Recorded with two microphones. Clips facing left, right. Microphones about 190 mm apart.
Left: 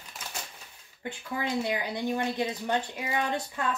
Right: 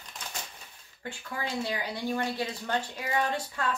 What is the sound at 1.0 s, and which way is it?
Speech, 20° left (ahead or behind).